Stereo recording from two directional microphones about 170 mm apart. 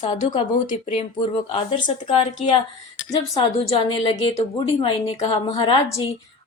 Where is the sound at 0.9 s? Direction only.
35° left (ahead or behind).